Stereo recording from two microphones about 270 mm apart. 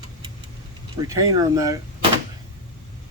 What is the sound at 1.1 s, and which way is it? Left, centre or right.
Speech, centre.